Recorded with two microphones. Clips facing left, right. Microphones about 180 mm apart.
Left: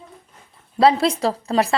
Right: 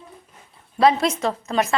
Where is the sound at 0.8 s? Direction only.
30° left (ahead or behind).